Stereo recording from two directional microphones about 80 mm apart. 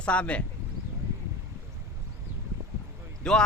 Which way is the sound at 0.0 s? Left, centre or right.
Centre.